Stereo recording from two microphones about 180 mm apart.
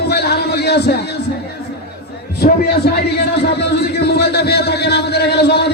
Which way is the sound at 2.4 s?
65° left (ahead or behind).